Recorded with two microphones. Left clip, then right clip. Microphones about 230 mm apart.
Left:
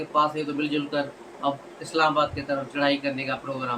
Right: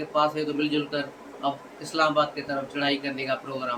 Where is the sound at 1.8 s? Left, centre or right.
Centre.